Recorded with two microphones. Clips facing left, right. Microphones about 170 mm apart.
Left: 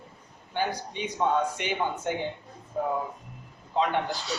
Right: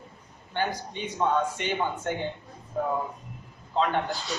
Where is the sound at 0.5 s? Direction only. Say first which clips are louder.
Even; 10° left (ahead or behind).